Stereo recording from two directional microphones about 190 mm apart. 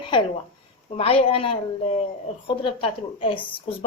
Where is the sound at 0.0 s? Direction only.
25° left (ahead or behind).